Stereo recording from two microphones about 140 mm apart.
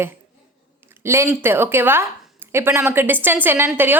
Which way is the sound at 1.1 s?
20° right (ahead or behind).